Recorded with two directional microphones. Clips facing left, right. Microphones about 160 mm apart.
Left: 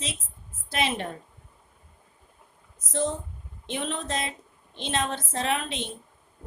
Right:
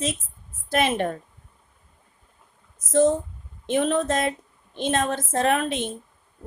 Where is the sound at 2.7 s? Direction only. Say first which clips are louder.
Right 9 dB; 45° right (ahead or behind).